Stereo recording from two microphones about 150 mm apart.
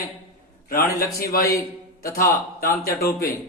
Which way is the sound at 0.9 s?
85° left.